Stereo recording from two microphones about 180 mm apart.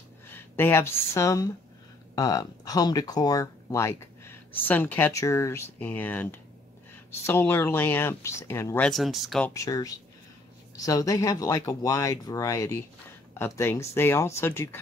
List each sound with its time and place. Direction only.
0.3 s speech: 10° left (ahead or behind)
9.5 s speech: 20° left (ahead or behind)